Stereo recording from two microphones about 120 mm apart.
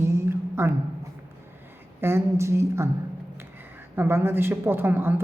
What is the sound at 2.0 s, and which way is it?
Speech, 20° right (ahead or behind).